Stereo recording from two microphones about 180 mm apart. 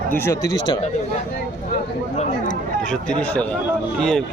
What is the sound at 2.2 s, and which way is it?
Speech, 45° left (ahead or behind).